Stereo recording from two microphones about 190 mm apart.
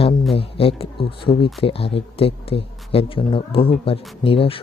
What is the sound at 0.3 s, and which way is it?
Speech, 30° left (ahead or behind).